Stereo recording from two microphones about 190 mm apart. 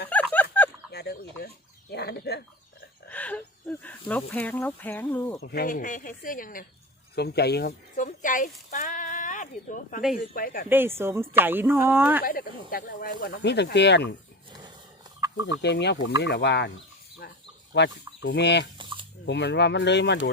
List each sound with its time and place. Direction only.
0.1 s a sound: 10° left (ahead or behind)
0.9 s chicken: 60° left (ahead or behind)
1.9 s speech: 60° left (ahead or behind)
3.1 s speech: 5° left (ahead or behind)
5.4 s speech: 55° left (ahead or behind)
7.2 s speech: 60° left (ahead or behind)
8.0 s speech: 45° left (ahead or behind)
10.7 s speech: 10° right (ahead or behind)
12.2 s speech: 50° left (ahead or behind)
15.6 s speech: 65° left (ahead or behind)
17.7 s speech: 70° left (ahead or behind)
18.8 s a sound: 25° right (ahead or behind)
19.2 s speech: 65° left (ahead or behind)